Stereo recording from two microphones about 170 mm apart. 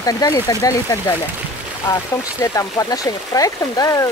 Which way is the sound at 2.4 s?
20° left (ahead or behind).